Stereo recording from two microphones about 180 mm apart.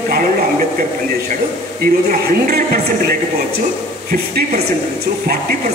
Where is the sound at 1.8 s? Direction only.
55° right (ahead or behind).